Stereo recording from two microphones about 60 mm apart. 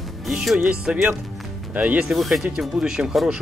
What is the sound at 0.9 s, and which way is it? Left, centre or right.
Speech, centre.